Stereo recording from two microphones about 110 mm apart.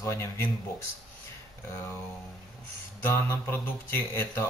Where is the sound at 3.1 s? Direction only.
20° left (ahead or behind).